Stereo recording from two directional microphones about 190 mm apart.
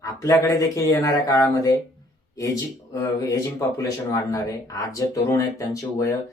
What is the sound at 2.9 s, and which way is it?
Speech, 20° left (ahead or behind).